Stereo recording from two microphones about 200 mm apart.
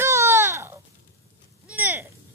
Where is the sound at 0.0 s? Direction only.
15° right (ahead or behind).